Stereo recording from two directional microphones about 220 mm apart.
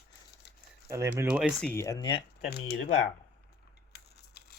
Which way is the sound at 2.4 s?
45° left (ahead or behind).